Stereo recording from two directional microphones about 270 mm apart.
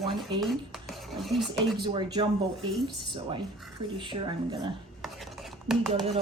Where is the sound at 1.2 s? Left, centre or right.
Centre.